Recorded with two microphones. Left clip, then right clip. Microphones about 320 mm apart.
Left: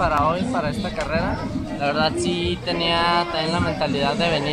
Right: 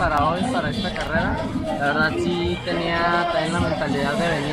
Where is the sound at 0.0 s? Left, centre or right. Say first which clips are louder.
Even; centre.